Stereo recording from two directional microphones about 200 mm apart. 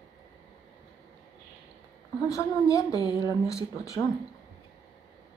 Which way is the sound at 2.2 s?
15° left (ahead or behind).